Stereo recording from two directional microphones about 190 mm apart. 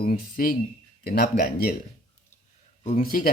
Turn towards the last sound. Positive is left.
turn(degrees=50)  # may be behind; listen again after turning